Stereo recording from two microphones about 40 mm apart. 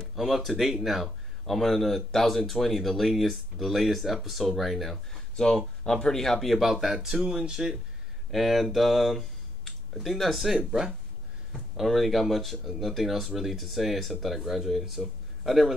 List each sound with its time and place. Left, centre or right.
0.1 s speech: centre
5.3 s speech: centre
6.5 s speech: centre
8.3 s speech: centre
10.6 s speech: centre
11.7 s speech: centre